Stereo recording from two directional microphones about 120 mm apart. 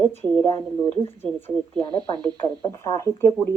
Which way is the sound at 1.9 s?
35° right (ahead or behind).